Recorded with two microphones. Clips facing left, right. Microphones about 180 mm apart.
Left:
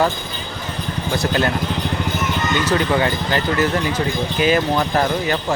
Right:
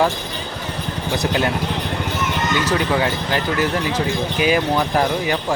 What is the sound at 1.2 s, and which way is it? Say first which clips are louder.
Speech: even; 10° right (ahead or behind).